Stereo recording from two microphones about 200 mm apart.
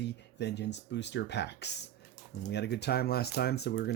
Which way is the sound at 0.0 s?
60° left (ahead or behind).